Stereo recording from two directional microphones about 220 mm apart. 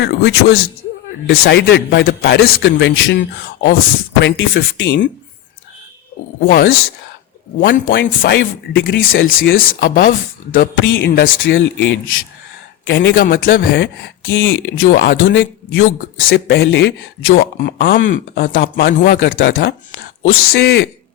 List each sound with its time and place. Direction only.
0.0 s a man's voice: 50° left (ahead or behind)
6.4 s a man's voice: 40° left (ahead or behind)
8.0 s speech: 40° left (ahead or behind)
8.4 s speech: 55° left (ahead or behind)
9.6 s speech: 40° left (ahead or behind)
11.3 s speech: 60° left (ahead or behind)
13.2 s speech: 40° left (ahead or behind); by 16.3 s 60° left (ahead or behind)
16.3 s speech: 50° left (ahead or behind)
17.6 s a man's voice: 50° left (ahead or behind)
20.5 s a man's voice: 45° left (ahead or behind)